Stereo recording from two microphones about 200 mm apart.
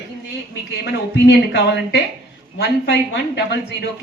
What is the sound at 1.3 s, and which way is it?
Speech, 60° left (ahead or behind).